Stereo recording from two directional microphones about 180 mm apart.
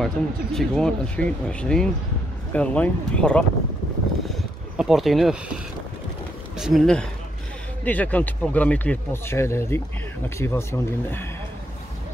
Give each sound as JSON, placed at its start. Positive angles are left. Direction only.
{"t": 0.0, "sound": "speech", "side_deg": 0}
{"t": 4.3, "sound": "a sound", "side_deg": 0}
{"t": 6.6, "sound": "speech", "side_deg": 0}